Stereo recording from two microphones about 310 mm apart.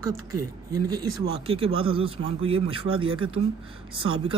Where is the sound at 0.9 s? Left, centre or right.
Centre.